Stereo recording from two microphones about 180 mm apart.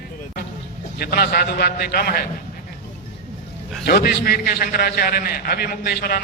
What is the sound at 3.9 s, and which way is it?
A man's voice, 60° left (ahead or behind).